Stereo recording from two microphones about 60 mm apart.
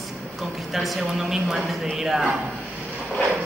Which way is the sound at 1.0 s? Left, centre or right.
Centre.